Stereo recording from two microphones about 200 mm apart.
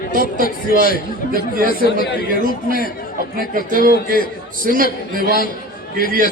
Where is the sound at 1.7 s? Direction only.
45° left (ahead or behind).